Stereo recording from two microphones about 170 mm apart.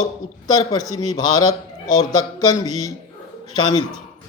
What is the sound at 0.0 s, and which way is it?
A man's voice, 25° left (ahead or behind).